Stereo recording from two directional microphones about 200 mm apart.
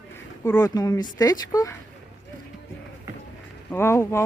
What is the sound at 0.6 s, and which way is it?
Speech, 20° left (ahead or behind).